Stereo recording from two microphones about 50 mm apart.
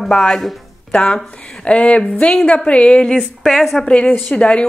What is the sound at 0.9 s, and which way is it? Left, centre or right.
Speech, left.